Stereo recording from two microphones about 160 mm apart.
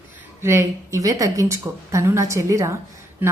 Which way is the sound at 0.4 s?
20° right (ahead or behind).